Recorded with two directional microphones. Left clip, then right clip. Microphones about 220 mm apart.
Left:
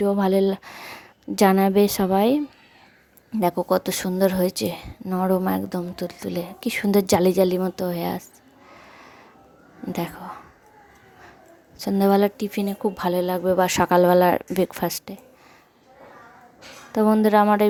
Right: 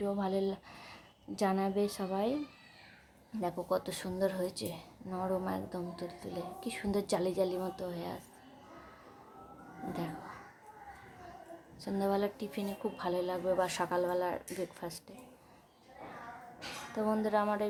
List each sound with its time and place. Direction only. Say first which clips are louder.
0.0 s speech: left 14 dB; 35° left (ahead or behind)
11.8 s speech: left 14 dB; 35° left (ahead or behind)
16.9 s speech: left 14 dB; 35° left (ahead or behind)